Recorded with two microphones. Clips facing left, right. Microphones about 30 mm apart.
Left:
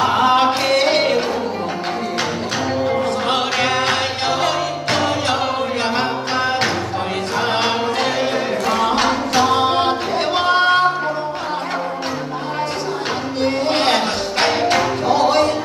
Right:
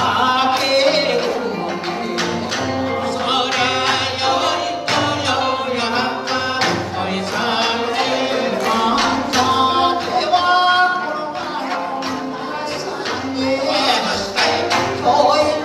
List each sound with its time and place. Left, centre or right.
0.0 s chant: centre
0.8 s carnatic music: centre
3.3 s music: centre
5.2 s a sound: centre
7.3 s music: centre
13.4 s music: centre